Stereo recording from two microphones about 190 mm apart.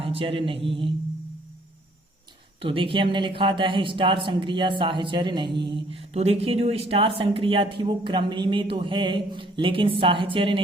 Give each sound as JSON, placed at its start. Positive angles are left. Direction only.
{"t": 0.0, "sound": "a man's voice", "side_deg": -30}
{"t": 2.6, "sound": "speech", "side_deg": -25}